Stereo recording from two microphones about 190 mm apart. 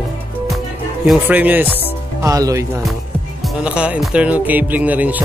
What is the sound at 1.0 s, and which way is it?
Speech, 5° right (ahead or behind).